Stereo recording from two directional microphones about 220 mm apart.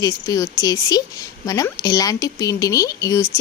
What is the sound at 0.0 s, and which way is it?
A woman's voice, 15° left (ahead or behind).